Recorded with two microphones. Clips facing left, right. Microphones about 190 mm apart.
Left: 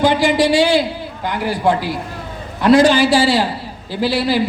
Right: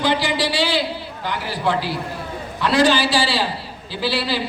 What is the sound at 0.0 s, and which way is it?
A woman's voice, 45° left (ahead or behind).